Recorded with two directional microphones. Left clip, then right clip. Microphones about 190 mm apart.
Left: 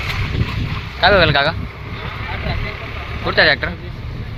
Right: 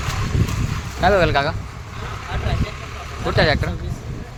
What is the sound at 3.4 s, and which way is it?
Speech, 10° right (ahead or behind).